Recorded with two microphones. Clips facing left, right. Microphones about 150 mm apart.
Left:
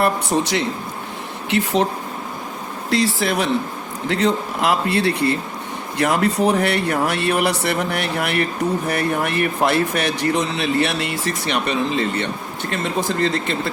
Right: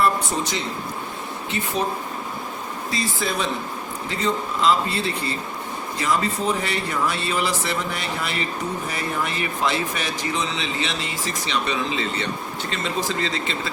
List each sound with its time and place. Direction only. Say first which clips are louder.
0.0 s speech: left 3 dB; 70° left (ahead or behind)
2.9 s speech: left 8 dB; 70° left (ahead or behind); by 13.6 s 55° left (ahead or behind)